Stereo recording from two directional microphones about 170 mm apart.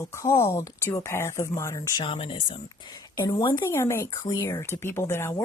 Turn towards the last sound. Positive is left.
turn(degrees=15)  # may be behind; listen again after turning